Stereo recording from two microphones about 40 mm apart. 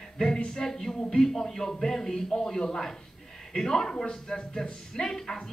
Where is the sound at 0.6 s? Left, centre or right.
Centre.